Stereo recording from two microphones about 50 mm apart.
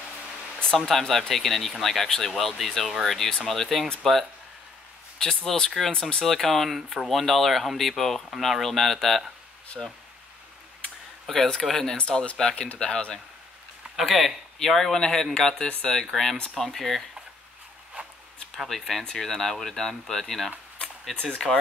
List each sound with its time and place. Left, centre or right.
0.7 s speech: centre
9.8 s speech: centre
11.2 s speech: centre
12.0 s speech: left
13.9 s speech: centre
18.0 s zipper: right
18.5 s speech: centre
21.5 s speech: centre